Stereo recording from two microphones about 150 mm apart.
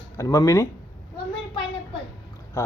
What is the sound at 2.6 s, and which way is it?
Boat, 20° left (ahead or behind).